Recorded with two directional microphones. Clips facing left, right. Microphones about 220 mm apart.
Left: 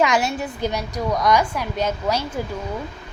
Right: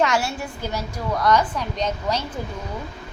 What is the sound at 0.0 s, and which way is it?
A woman's voice, 20° left (ahead or behind).